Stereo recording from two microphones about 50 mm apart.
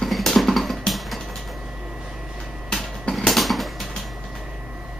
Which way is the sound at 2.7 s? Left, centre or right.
Centre.